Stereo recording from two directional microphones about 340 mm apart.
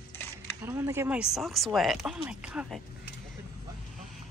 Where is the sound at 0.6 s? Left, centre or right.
Centre.